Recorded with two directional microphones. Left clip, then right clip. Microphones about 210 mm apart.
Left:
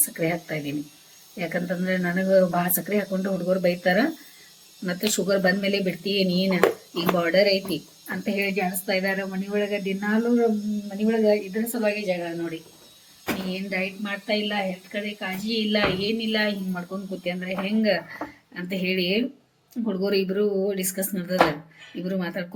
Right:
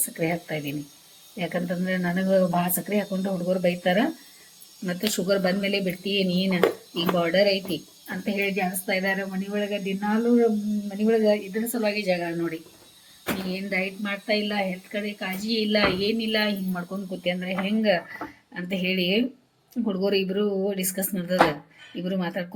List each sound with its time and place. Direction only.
0.2 s speech: 5° right (ahead or behind)
13.5 s speech: 15° right (ahead or behind)